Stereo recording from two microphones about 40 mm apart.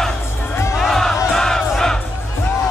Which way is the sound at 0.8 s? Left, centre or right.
Centre.